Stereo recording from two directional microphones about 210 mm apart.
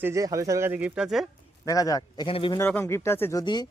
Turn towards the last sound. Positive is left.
turn(degrees=20)  # may be behind; listen again after turning